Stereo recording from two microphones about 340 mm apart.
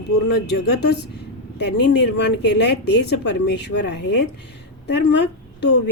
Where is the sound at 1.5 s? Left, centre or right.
Left.